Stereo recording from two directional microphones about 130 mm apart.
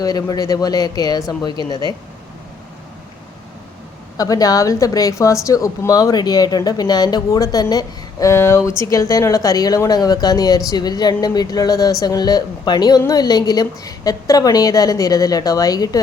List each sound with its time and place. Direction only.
0.0 s a woman's voice: 30° left (ahead or behind)
4.2 s a woman's voice: 30° left (ahead or behind)